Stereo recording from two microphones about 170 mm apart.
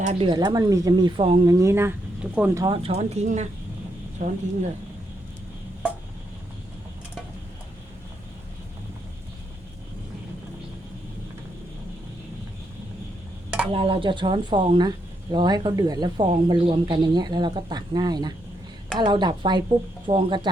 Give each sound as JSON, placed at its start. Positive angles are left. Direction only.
{"t": 0.0, "sound": "speech", "side_deg": -35}
{"t": 1.5, "sound": "speech", "side_deg": -15}
{"t": 2.6, "sound": "speech", "side_deg": -35}
{"t": 4.2, "sound": "speech", "side_deg": -55}
{"t": 13.7, "sound": "speech", "side_deg": -35}